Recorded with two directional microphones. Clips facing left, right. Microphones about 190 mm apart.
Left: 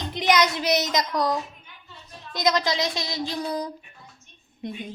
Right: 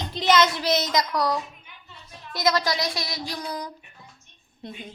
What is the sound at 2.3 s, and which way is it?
Child singing, 20° left (ahead or behind).